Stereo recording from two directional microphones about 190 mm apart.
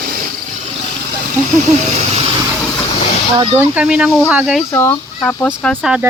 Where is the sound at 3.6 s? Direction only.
5° right (ahead or behind).